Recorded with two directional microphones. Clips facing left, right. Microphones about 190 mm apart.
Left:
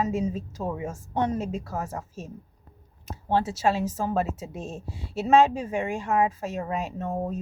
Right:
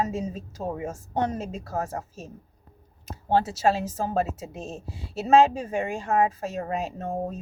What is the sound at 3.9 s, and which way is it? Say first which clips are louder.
A woman's voice: even; 35° right (ahead or behind).